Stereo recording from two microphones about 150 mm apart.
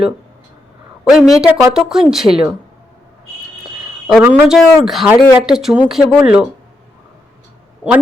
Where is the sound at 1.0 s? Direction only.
Centre (ahead or behind).